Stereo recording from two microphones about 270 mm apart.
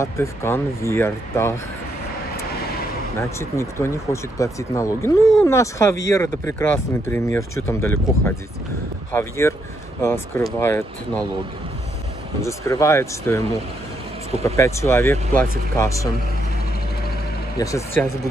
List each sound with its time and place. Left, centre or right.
0.0 s speech: centre
3.2 s speech: centre
12.4 s speech: centre
14.4 s speech: centre
17.6 s speech: centre